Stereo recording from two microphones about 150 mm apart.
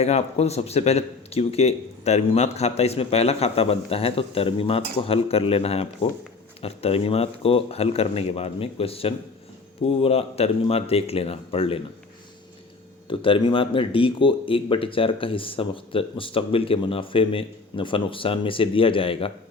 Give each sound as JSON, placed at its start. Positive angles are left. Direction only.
{"t": 0.0, "sound": "speech", "side_deg": 45}
{"t": 13.1, "sound": "speech", "side_deg": 35}